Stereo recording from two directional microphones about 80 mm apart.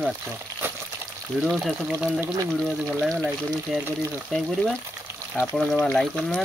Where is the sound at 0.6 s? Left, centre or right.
Right.